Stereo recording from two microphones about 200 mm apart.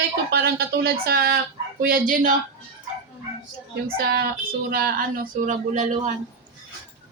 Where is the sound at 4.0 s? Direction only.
50° right (ahead or behind).